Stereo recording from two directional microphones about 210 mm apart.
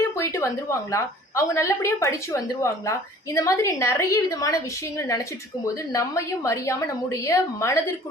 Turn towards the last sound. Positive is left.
turn(degrees=15)  # may be behind; listen again after turning